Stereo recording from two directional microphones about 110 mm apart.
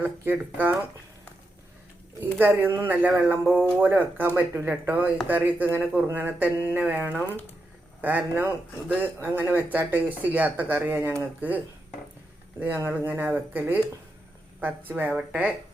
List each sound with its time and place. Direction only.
0.0 s speech: 15° right (ahead or behind)
2.2 s speech: 20° right (ahead or behind)